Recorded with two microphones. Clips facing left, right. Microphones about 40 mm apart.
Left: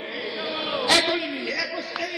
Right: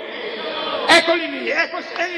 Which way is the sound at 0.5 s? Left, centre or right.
Right.